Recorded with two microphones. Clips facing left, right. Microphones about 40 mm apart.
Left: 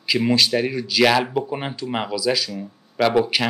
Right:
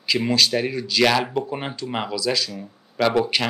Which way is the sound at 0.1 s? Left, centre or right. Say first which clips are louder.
Left 1 dB; centre.